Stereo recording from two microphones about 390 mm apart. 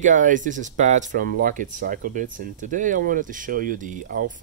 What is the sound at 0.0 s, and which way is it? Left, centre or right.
Speech, centre.